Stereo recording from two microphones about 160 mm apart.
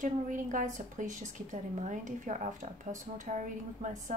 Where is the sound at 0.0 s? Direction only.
50° right (ahead or behind).